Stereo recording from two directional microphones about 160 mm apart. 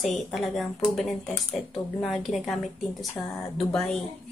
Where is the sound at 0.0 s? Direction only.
Centre (ahead or behind).